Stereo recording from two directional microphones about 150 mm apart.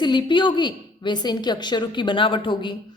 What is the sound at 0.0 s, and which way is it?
A woman's voice, 30° left (ahead or behind).